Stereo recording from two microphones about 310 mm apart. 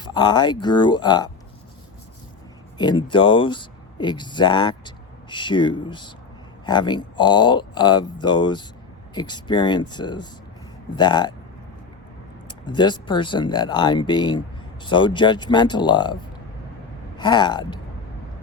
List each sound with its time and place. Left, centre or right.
0.0 s speech: centre
2.7 s speech: centre
12.5 s speech: centre
17.2 s speech: centre